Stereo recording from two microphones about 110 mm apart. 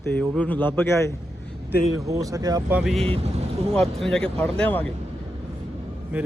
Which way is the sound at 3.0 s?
60° right (ahead or behind).